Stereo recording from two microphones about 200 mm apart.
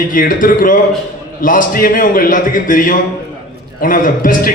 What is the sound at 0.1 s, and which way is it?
A man's voice, 45° left (ahead or behind).